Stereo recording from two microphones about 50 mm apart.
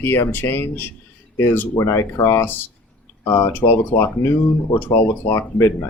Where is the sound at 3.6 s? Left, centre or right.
Left.